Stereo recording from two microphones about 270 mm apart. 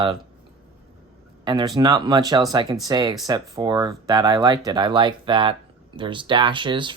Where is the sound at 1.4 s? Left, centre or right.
Centre.